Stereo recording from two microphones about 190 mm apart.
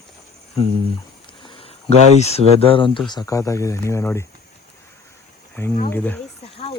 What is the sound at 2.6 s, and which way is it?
A man's voice, 30° left (ahead or behind).